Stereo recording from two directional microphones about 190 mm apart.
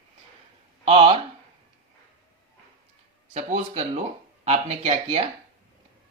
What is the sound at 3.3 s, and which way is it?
Speech, 35° right (ahead or behind).